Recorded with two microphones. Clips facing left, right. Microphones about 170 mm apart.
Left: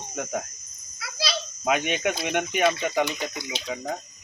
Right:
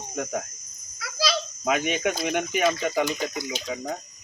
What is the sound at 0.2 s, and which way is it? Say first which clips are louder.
Speech: right 1 dB; centre (ahead or behind).